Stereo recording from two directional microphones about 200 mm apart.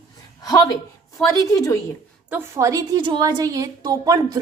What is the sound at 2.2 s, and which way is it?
A woman's voice, 10° right (ahead or behind).